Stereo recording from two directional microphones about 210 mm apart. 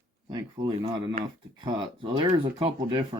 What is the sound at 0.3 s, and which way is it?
Speech, 20° right (ahead or behind).